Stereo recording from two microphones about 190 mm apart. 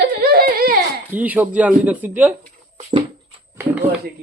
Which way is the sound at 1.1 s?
10° right (ahead or behind).